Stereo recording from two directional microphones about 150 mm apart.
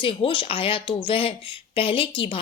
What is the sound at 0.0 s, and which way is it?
A woman's voice, 35° left (ahead or behind).